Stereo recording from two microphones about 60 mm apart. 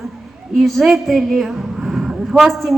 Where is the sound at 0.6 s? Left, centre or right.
Centre.